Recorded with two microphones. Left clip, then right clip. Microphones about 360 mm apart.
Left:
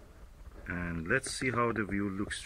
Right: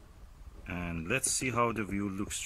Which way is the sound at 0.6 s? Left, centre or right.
Centre.